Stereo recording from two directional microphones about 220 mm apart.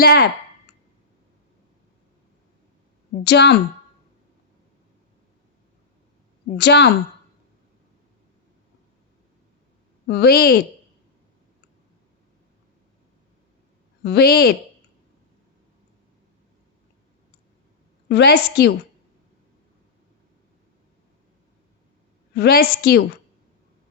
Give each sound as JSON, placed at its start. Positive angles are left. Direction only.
{"t": 0.0, "sound": "a woman's voice", "side_deg": 45}
{"t": 3.2, "sound": "a woman's voice", "side_deg": 50}
{"t": 6.6, "sound": "a woman's voice", "side_deg": 50}
{"t": 10.1, "sound": "a woman's voice", "side_deg": 45}
{"t": 14.0, "sound": "a woman's voice", "side_deg": 45}
{"t": 18.1, "sound": "a woman's voice", "side_deg": 50}
{"t": 22.4, "sound": "a woman's voice", "side_deg": 45}